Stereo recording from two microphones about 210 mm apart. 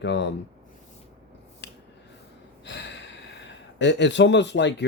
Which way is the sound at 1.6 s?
55° left (ahead or behind).